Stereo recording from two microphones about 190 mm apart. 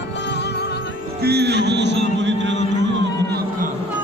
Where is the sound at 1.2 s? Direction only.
60° right (ahead or behind).